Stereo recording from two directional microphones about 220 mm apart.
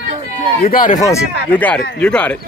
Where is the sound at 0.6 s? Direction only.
35° left (ahead or behind).